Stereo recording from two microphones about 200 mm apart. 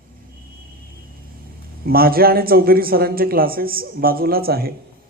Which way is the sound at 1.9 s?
50° right (ahead or behind).